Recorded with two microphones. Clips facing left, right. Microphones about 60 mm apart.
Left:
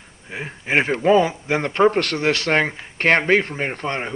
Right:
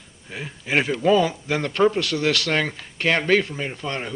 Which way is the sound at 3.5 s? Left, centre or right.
Left.